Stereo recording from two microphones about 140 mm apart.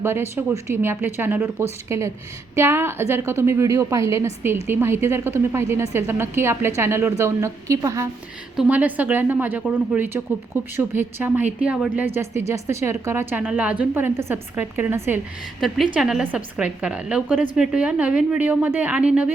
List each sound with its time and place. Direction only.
0.0 s a woman's voice: 15° right (ahead or behind)
8.5 s a woman's voice: 10° right (ahead or behind)
15.6 s a woman's voice: centre (ahead or behind)